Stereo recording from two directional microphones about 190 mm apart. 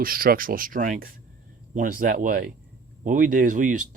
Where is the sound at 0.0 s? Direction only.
50° right (ahead or behind).